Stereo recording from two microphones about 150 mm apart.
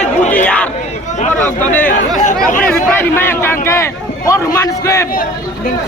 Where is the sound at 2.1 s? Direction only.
55° left (ahead or behind).